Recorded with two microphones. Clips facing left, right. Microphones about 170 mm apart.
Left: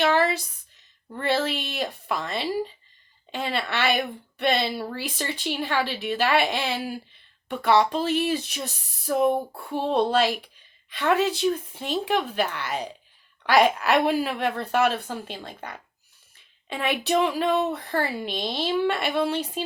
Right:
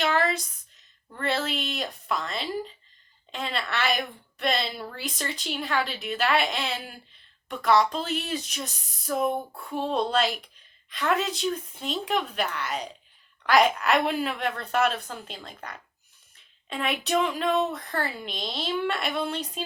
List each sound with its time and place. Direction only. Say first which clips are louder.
0.1 s a sound: left 3 dB; 5° left (ahead or behind)
1.2 s a woman's voice: left 3 dB; 5° left (ahead or behind)
9.2 s a sound: left 5 dB; 30° left (ahead or behind)
9.9 s a woman's voice: left 4 dB; 5° left (ahead or behind)
17.7 s speech: left 5 dB; 30° left (ahead or behind)
17.9 s a woman's voice: left 5 dB; 5° left (ahead or behind)